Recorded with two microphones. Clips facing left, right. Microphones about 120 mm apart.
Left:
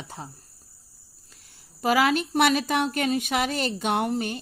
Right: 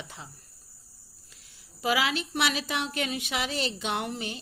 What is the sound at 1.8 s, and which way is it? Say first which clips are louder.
Speech: left 6 dB; 45° left (ahead or behind).